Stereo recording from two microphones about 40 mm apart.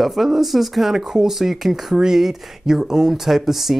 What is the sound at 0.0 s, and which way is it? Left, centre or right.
Speech, centre.